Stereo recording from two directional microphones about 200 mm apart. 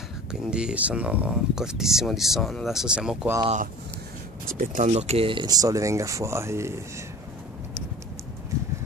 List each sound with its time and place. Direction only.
0.3 s speech: 5° right (ahead or behind)
4.6 s speech: 35° right (ahead or behind); by 6.8 s 15° right (ahead or behind)